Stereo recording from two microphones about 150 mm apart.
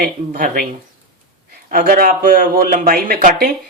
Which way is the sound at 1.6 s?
70° right (ahead or behind).